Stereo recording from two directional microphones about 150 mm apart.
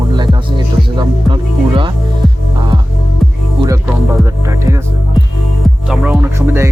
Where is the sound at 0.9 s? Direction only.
35° right (ahead or behind).